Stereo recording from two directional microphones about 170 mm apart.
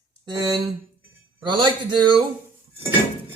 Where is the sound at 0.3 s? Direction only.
25° right (ahead or behind).